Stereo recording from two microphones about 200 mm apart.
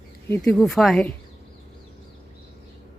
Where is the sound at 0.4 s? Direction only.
Centre (ahead or behind).